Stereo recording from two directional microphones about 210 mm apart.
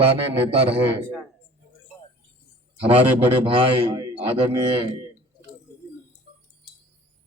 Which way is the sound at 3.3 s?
25° right (ahead or behind).